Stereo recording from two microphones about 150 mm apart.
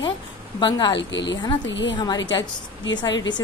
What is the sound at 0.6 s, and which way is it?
Speech, 30° left (ahead or behind).